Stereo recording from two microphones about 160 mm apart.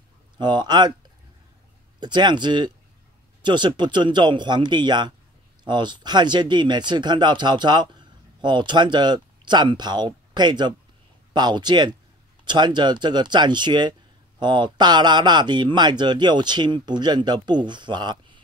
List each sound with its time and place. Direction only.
0.4 s speech: 30° right (ahead or behind)
2.0 s speech: 30° right (ahead or behind)